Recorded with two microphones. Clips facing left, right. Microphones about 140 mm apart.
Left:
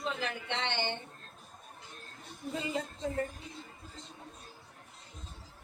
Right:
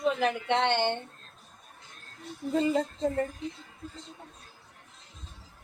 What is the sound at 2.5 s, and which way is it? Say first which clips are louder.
Speech: right 9 dB; 45° right (ahead or behind).